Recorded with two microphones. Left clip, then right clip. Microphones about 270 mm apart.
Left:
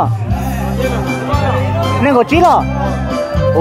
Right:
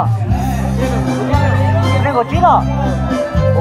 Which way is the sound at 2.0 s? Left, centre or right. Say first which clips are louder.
Left 5 dB; left.